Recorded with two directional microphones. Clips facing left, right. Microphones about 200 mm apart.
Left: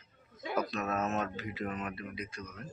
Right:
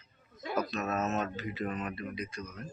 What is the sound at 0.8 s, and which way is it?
Speech, 5° right (ahead or behind).